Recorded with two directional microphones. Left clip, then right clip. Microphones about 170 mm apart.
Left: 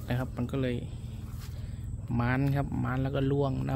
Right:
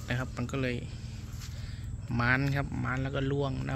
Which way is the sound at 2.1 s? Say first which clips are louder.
Right 2 dB; 20° left (ahead or behind).